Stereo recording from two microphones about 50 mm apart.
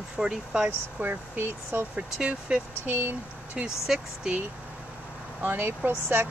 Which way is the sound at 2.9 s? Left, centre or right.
Right.